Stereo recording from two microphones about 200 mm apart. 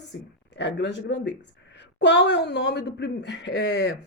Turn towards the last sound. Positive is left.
turn(degrees=60)  # may be behind; listen again after turning